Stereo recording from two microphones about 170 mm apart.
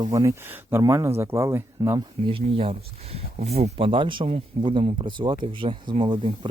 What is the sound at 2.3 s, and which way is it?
Speech, 35° right (ahead or behind).